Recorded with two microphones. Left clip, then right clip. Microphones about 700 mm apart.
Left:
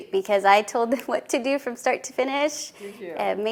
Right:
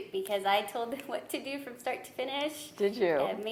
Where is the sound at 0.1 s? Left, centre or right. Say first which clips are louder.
Left 11 dB; left.